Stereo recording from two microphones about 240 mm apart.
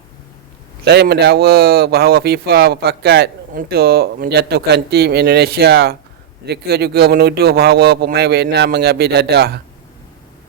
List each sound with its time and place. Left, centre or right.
0.9 s speech: right